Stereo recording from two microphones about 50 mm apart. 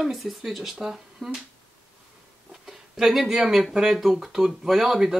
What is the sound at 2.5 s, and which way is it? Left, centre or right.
Speech, centre.